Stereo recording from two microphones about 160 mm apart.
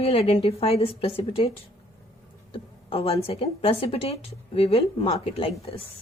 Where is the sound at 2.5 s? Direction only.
35° left (ahead or behind).